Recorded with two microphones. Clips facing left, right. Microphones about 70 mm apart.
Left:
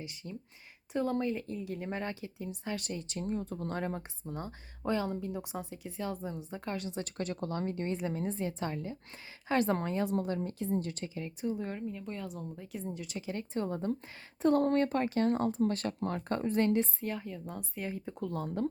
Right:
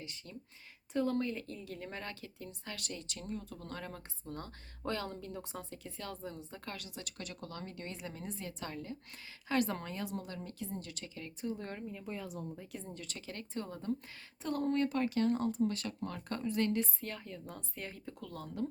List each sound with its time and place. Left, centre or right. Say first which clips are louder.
0.0 s speech: left 5 dB; centre
4.2 s speech: left 4 dB; centre
9.5 s speech: left 5 dB; left
11.1 s speech: left 3 dB; centre
14.6 s speech: left 4 dB; left
17.0 s speech: left 6 dB; centre
18.0 s speech: left 8 dB; left